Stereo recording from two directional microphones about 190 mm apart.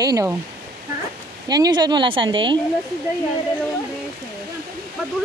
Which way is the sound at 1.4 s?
20° right (ahead or behind).